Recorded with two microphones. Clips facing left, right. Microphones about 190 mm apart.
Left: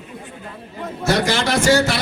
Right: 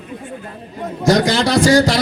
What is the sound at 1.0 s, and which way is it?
Speech, 35° right (ahead or behind).